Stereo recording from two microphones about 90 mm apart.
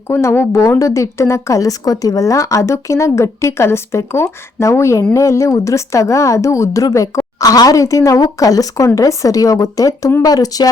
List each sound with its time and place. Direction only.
0.1 s a woman's voice: 30° left (ahead or behind)